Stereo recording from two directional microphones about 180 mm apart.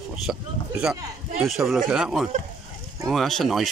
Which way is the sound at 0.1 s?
5° right (ahead or behind).